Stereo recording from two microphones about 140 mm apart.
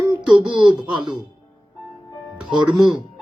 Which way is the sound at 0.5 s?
35° right (ahead or behind).